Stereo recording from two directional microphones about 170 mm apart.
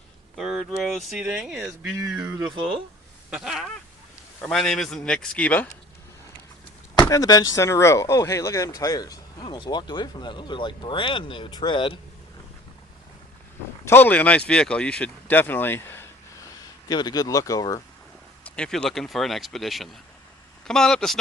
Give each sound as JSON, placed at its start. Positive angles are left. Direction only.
{"t": 0.3, "sound": "speech", "side_deg": 0}
{"t": 1.8, "sound": "a sound", "side_deg": -15}
{"t": 2.4, "sound": "speech", "side_deg": -30}
{"t": 3.2, "sound": "quack", "side_deg": -5}
{"t": 4.4, "sound": "speech", "side_deg": 5}
{"t": 7.0, "sound": "speech", "side_deg": 20}
{"t": 13.8, "sound": "speech", "side_deg": 10}
{"t": 16.9, "sound": "speech", "side_deg": 25}
{"t": 18.4, "sound": "speech", "side_deg": 5}